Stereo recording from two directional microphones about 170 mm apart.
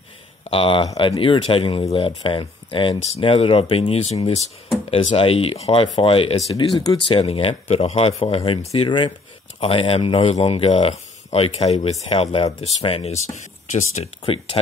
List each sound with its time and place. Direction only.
0.5 s speech: 30° left (ahead or behind)
14.2 s speech: 30° left (ahead or behind)